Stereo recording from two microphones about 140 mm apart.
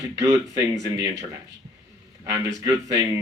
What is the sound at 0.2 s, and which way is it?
Speech, 20° right (ahead or behind).